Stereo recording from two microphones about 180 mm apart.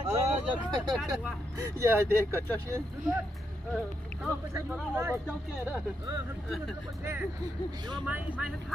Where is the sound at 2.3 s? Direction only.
10° left (ahead or behind).